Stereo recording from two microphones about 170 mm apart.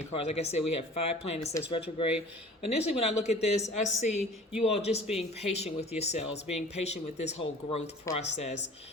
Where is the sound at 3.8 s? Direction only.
45° left (ahead or behind).